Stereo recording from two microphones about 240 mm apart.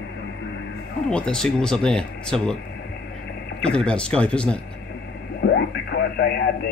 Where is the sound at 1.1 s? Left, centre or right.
Centre.